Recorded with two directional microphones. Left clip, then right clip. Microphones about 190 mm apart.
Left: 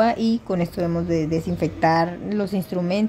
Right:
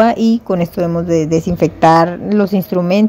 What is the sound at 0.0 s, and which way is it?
A woman's voice, 30° right (ahead or behind).